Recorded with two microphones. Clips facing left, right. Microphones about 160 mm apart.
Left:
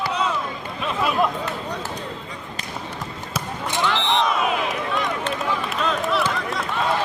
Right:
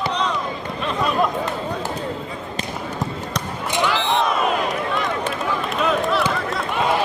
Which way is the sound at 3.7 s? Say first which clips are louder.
Right 2 dB; 10° right (ahead or behind).